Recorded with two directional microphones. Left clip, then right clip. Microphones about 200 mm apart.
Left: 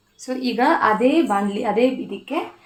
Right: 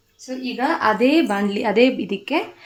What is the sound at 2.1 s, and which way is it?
Speech, 30° right (ahead or behind).